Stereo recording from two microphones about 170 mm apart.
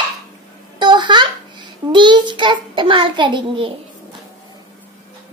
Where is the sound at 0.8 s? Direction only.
25° right (ahead or behind).